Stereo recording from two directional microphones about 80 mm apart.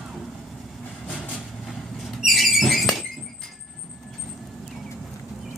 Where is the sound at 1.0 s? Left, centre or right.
Centre.